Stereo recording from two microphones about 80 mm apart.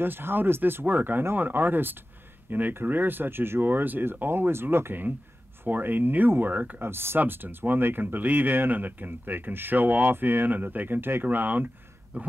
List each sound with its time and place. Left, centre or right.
0.0 s speech: right